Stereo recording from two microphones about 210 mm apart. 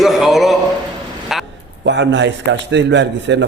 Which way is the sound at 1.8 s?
60° right (ahead or behind).